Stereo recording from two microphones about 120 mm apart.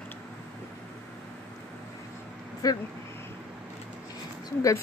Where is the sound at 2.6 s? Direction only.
30° left (ahead or behind).